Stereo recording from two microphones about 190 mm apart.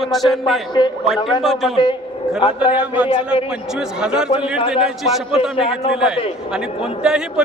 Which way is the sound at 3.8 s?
5° right (ahead or behind).